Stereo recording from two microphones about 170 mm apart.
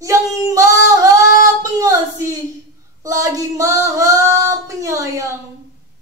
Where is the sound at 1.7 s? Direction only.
20° right (ahead or behind).